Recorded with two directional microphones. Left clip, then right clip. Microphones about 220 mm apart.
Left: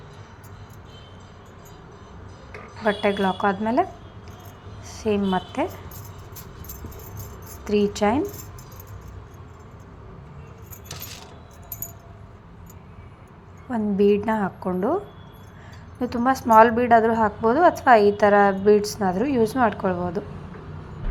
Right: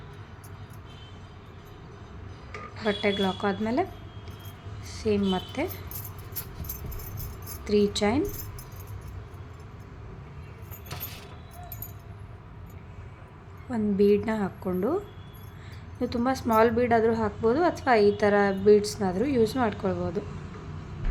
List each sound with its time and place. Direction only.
2.8 s a woman's voice: 5° right (ahead or behind)
4.9 s speech: 10° right (ahead or behind)
7.6 s a woman's voice: 10° right (ahead or behind)
13.7 s a woman's voice: 10° right (ahead or behind)
16.0 s a woman's voice: 10° right (ahead or behind)